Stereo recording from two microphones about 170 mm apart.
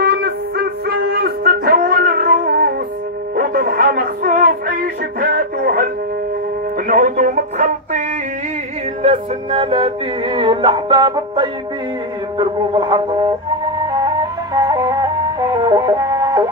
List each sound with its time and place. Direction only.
0.0 s music: 65° right (ahead or behind)
6.9 s music: 50° right (ahead or behind)
9.0 s music: 35° right (ahead or behind); by 16.4 s 20° right (ahead or behind)